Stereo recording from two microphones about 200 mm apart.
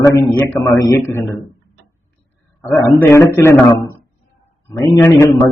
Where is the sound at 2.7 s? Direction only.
15° left (ahead or behind).